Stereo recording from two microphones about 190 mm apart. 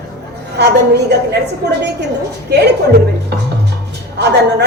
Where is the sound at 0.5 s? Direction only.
60° right (ahead or behind).